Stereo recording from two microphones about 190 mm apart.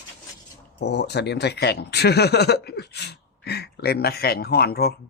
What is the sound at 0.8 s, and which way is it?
Speech, 60° left (ahead or behind).